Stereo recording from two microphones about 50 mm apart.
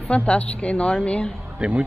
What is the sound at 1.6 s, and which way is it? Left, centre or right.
Speech, right.